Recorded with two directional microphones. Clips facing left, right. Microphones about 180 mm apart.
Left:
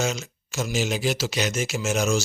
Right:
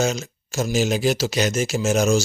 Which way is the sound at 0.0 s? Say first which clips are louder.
Right 4 dB; 40° right (ahead or behind).